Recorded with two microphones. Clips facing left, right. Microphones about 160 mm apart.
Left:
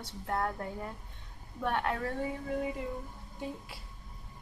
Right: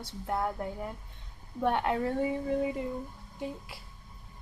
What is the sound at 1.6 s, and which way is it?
Speech, 20° right (ahead or behind).